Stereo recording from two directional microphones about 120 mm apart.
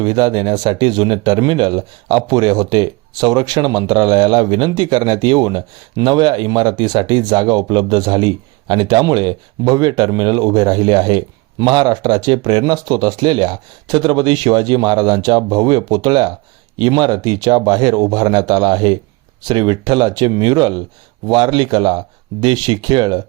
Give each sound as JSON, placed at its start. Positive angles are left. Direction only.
{"t": 0.0, "sound": "speech", "side_deg": -40}